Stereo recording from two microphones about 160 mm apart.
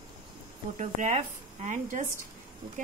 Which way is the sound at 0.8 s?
50° right (ahead or behind).